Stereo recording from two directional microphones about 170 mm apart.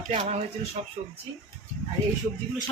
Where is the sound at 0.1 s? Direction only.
35° right (ahead or behind).